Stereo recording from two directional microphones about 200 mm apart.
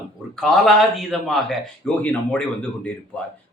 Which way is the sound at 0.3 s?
Centre (ahead or behind).